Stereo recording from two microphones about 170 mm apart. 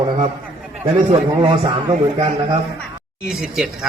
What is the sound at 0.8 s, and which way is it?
A man's voice, 35° right (ahead or behind).